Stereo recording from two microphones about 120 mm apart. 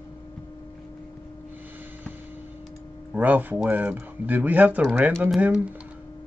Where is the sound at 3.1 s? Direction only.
15° right (ahead or behind).